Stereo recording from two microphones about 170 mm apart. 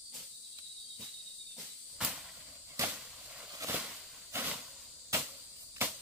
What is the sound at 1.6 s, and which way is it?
Cricket, 5° right (ahead or behind).